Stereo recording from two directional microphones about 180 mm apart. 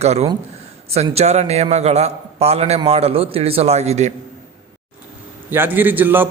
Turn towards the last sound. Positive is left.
turn(degrees=-10)  # may be behind; listen again after turning